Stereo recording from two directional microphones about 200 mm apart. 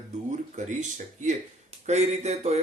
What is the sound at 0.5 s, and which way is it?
Speech, 35° right (ahead or behind).